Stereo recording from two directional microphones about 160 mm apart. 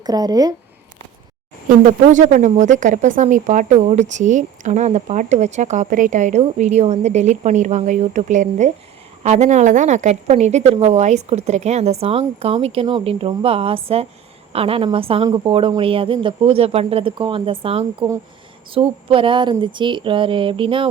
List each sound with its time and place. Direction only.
0.0 s speech: 25° right (ahead or behind)
1.8 s a woman's voice: 50° right (ahead or behind); by 20.9 s 35° right (ahead or behind)